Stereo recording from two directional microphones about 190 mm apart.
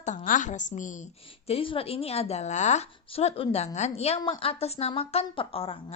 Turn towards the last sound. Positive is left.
turn(degrees=30)  # may be behind; listen again after turning